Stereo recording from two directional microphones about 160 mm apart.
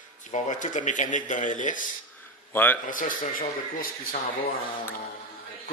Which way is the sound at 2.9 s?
60° left (ahead or behind).